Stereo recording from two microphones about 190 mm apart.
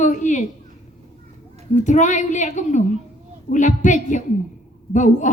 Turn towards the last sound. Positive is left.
turn(degrees=40)  # may be behind; listen again after turning